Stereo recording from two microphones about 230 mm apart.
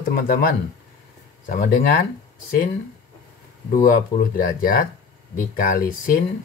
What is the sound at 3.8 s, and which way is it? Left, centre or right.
Speech, left.